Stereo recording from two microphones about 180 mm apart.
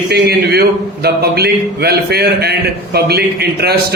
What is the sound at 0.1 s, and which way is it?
A man's voice, 60° right (ahead or behind).